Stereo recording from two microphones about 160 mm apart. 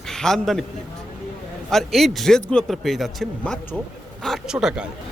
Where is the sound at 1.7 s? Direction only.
Centre (ahead or behind).